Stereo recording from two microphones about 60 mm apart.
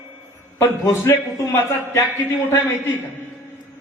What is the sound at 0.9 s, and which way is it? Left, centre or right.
A man's voice, left.